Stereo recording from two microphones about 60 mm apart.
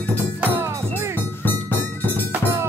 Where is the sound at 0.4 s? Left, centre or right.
Right.